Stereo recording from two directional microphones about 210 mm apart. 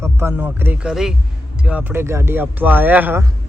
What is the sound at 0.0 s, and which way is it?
Speech, 10° right (ahead or behind).